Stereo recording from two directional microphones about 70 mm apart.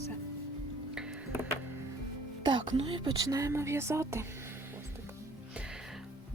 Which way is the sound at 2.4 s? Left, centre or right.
Right.